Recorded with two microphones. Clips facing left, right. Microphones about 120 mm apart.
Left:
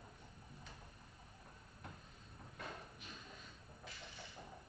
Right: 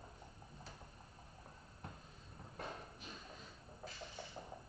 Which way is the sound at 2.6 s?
35° right (ahead or behind).